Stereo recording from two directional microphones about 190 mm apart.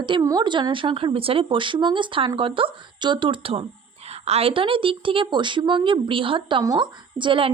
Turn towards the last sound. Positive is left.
turn(degrees=-25)  # may be behind; listen again after turning